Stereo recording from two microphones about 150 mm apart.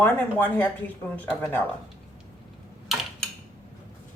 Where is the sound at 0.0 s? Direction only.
15° left (ahead or behind).